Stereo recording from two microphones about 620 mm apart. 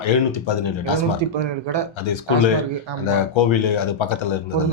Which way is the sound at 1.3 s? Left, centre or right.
Right.